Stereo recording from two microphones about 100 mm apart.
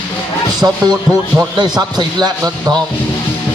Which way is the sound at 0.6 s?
45° right (ahead or behind).